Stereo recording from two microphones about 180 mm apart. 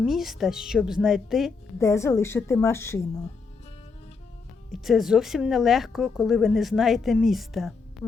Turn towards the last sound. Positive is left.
turn(degrees=0)  # may be behind; listen again after turning